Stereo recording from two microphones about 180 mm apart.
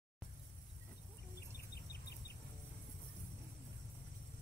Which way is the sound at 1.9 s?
60° left (ahead or behind).